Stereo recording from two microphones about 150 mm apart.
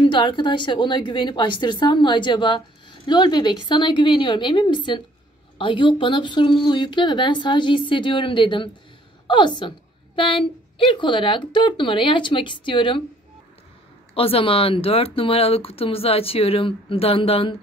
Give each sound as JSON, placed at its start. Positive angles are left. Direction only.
{"t": 0.0, "sound": "a woman's voice", "side_deg": 35}
{"t": 14.1, "sound": "a woman's voice", "side_deg": 40}